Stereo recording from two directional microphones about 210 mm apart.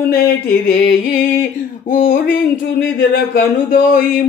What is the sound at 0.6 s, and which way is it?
Speech, 45° left (ahead or behind).